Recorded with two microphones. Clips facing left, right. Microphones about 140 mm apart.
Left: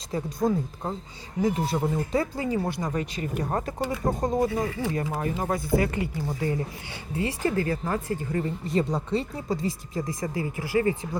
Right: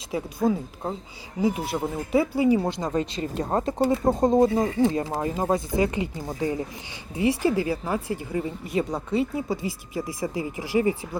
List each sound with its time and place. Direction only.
0.1 s speech: 5° right (ahead or behind)
2.6 s speech: 20° right (ahead or behind)
5.4 s speech: 20° right (ahead or behind)